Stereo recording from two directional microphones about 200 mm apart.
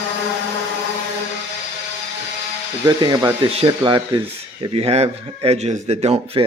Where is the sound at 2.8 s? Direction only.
20° right (ahead or behind).